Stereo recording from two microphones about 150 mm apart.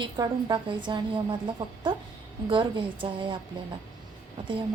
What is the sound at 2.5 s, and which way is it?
Speech, 35° right (ahead or behind).